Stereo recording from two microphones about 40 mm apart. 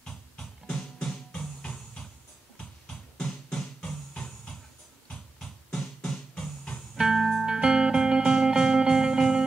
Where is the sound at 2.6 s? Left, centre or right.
Left.